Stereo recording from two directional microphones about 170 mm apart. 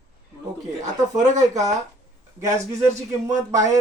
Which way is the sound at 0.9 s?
45° right (ahead or behind).